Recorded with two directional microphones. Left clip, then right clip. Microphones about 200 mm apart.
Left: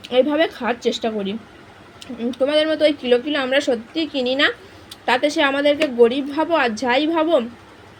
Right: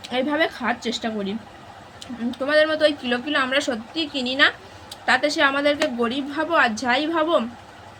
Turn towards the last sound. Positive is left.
turn(degrees=5)  # may be behind; listen again after turning